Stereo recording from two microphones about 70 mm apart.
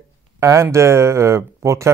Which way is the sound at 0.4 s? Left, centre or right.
Right.